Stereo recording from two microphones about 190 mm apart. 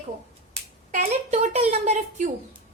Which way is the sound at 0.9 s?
40° right (ahead or behind).